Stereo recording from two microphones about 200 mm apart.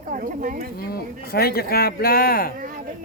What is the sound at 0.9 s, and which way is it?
Speech, 50° left (ahead or behind).